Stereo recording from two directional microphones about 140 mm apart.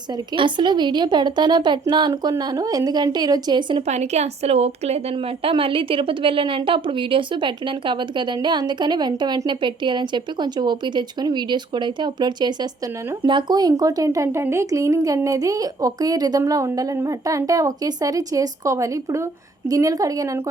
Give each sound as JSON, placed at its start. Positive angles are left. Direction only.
{"t": 0.3, "sound": "a woman's voice", "side_deg": -35}
{"t": 3.8, "sound": "a woman's voice", "side_deg": -55}